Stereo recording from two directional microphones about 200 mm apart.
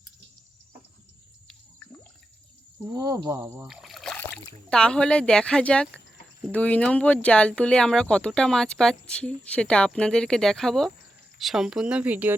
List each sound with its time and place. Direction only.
2.9 s speech: 20° right (ahead or behind)
3.4 s a sound: 10° right (ahead or behind)
4.7 s speech: 5° left (ahead or behind)